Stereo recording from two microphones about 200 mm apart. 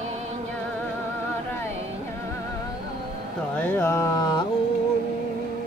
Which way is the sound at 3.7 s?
10° left (ahead or behind).